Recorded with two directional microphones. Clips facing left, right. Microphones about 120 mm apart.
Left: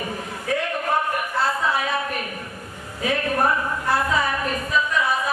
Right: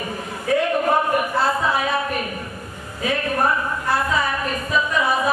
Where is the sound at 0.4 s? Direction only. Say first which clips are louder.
Right 6 dB; 15° right (ahead or behind).